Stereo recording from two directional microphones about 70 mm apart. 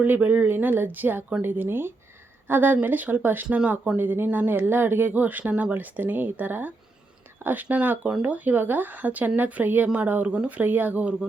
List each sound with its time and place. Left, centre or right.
0.0 s speech: right
3.4 s speech: centre
3.9 s speech: right